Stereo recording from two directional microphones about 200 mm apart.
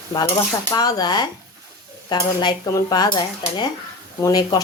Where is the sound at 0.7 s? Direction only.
20° left (ahead or behind).